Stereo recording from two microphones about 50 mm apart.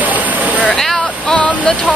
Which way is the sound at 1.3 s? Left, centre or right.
Left.